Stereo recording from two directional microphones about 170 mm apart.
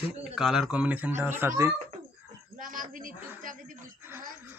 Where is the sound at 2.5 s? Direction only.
50° right (ahead or behind).